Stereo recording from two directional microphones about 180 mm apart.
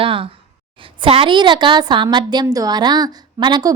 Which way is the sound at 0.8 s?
30° right (ahead or behind).